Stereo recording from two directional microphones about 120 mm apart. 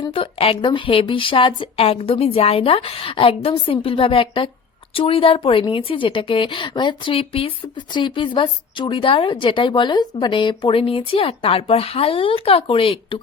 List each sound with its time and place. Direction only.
0.1 s a woman's voice: 50° left (ahead or behind)